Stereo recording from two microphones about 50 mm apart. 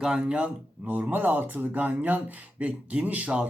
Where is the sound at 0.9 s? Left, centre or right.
Right.